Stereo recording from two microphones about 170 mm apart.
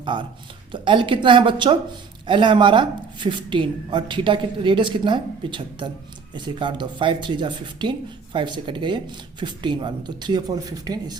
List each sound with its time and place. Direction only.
0.0 s a woman's voice: 30° right (ahead or behind)